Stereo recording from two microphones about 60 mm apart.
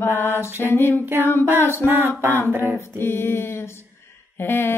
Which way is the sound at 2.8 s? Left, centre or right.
Left.